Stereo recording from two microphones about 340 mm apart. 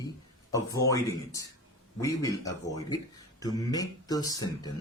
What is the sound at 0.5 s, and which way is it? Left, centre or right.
Speech, centre.